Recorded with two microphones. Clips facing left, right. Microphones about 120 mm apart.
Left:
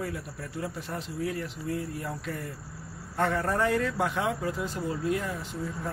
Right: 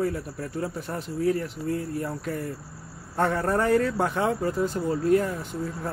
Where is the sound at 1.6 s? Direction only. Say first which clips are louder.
Right 5 dB; 45° right (ahead or behind).